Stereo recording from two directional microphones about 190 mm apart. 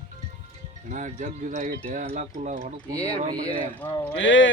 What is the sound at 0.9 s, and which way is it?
Speech, 40° right (ahead or behind).